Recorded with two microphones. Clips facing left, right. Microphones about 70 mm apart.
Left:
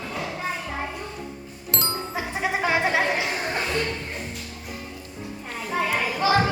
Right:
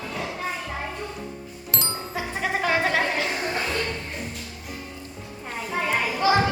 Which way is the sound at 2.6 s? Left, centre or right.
Centre.